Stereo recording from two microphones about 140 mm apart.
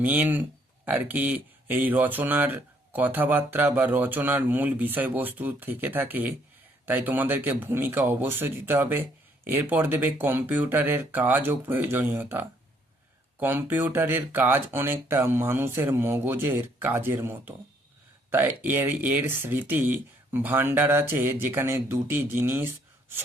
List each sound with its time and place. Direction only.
0.0 s speech: 15° right (ahead or behind)